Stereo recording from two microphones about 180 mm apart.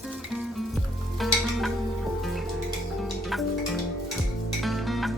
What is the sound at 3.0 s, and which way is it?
Music, centre (ahead or behind).